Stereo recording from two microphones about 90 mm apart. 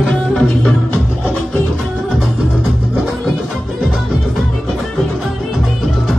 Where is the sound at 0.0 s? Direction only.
Centre (ahead or behind).